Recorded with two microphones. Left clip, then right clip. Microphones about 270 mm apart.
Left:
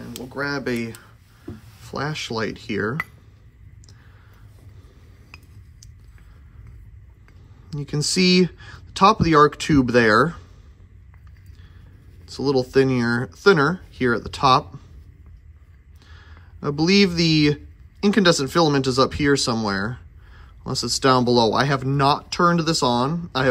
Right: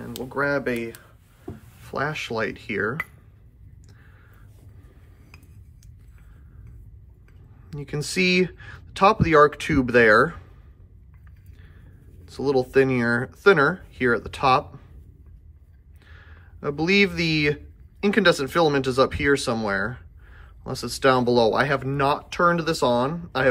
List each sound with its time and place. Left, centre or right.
0.0 s speech: centre
0.7 s speech: centre
1.9 s speech: centre
7.7 s speech: centre
12.3 s speech: centre
16.1 s speech: centre